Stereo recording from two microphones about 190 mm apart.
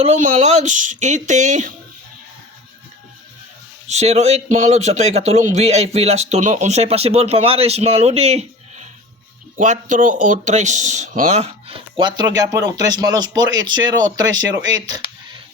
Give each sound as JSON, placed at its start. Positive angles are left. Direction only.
{"t": 0.0, "sound": "speech", "side_deg": -35}
{"t": 3.8, "sound": "speech", "side_deg": -35}